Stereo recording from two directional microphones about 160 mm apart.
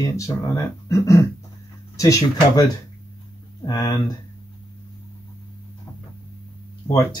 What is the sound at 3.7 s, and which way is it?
Speech, 25° left (ahead or behind).